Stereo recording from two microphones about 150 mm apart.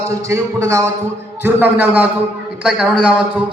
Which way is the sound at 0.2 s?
20° right (ahead or behind).